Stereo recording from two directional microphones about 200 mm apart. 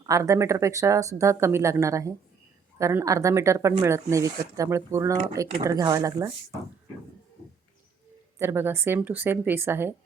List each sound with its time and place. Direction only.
0.0 s speech: 15° right (ahead or behind)
8.4 s speech: 10° right (ahead or behind)